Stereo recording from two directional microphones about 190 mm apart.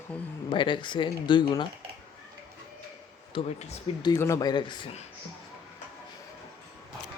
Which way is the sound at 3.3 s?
30° left (ahead or behind).